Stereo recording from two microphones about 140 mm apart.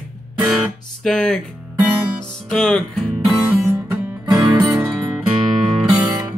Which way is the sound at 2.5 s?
5° left (ahead or behind).